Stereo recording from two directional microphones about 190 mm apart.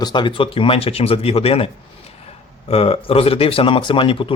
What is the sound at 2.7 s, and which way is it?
Speech, 30° left (ahead or behind).